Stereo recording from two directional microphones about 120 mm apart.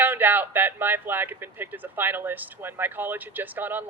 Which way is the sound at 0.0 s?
15° right (ahead or behind).